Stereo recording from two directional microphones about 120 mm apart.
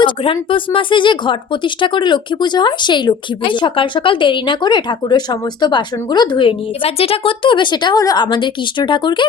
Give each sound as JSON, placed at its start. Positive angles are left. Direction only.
{"t": 0.0, "sound": "speech", "side_deg": 45}